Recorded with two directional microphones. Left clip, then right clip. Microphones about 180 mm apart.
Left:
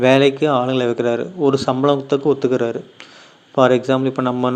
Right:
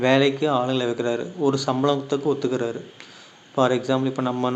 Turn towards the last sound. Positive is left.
turn(degrees=30)  # may be behind; listen again after turning